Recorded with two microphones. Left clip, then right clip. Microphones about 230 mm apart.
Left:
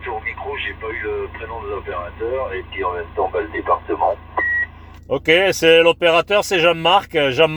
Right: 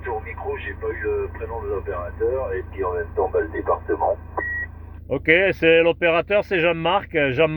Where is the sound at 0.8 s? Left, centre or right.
Left.